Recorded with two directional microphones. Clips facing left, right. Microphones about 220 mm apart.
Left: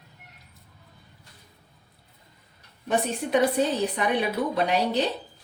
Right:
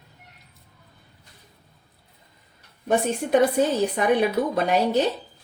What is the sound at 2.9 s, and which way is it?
Speech, 45° right (ahead or behind).